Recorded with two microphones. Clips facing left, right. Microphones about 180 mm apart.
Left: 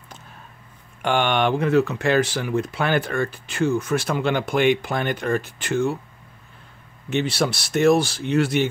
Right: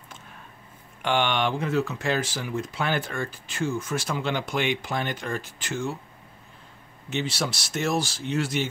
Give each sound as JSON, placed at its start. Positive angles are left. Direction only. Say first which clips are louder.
{"t": 1.0, "sound": "speech", "louder": "left 4 dB", "side_deg": 50}
{"t": 7.1, "sound": "speech", "louder": "left 6 dB", "side_deg": 60}